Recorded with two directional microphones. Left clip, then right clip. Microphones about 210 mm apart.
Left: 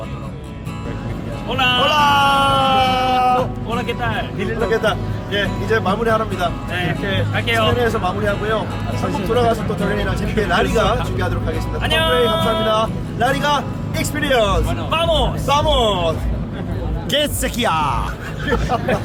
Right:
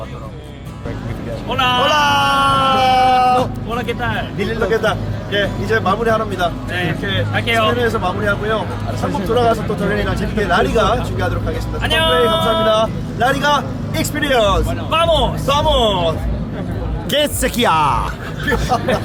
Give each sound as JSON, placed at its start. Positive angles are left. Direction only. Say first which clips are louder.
{"t": 1.5, "sound": "a sound", "louder": "right 1 dB", "side_deg": -5}
{"t": 4.7, "sound": "speech", "louder": "right 1 dB", "side_deg": 0}
{"t": 9.0, "sound": "speech", "louder": "right 2 dB", "side_deg": -35}
{"t": 9.3, "sound": "speech", "louder": "right 2 dB", "side_deg": 0}
{"t": 17.1, "sound": "speech", "louder": "right 3 dB", "side_deg": -20}
{"t": 18.9, "sound": "speech", "louder": "right 1 dB", "side_deg": -35}